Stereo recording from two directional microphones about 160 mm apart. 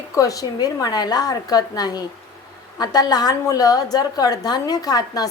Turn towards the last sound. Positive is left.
turn(degrees=25)  # may be behind; listen again after turning